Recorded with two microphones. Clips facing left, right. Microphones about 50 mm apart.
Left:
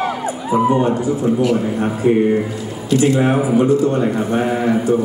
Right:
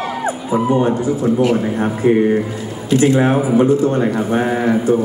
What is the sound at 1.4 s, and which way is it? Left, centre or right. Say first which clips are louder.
Speech: right 1 dB; right.